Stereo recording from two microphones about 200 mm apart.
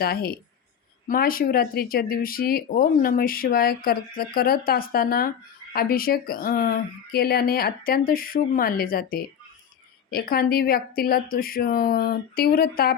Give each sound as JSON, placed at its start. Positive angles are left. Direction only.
{"t": 0.0, "sound": "speech", "side_deg": 50}